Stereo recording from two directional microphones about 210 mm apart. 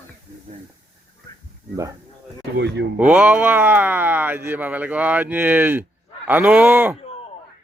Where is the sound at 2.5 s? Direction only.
55° right (ahead or behind).